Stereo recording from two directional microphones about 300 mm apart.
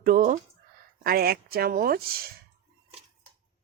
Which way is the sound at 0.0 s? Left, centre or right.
Right.